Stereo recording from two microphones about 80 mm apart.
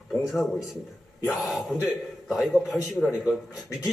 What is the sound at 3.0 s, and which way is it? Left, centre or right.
Speech, left.